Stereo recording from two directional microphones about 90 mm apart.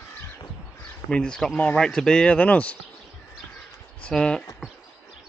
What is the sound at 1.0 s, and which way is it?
Speech, 10° left (ahead or behind).